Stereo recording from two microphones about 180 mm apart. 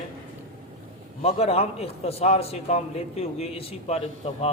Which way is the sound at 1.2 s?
35° left (ahead or behind).